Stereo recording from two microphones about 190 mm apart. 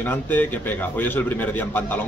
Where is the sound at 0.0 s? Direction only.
10° left (ahead or behind).